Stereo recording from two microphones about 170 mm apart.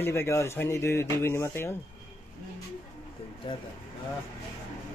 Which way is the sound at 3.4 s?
30° left (ahead or behind).